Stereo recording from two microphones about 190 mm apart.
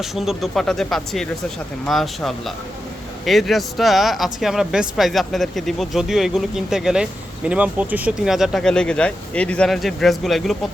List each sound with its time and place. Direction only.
0.0 s speech: centre (ahead or behind)